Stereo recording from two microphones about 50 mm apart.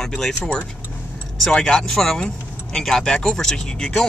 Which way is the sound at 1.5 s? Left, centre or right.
Centre.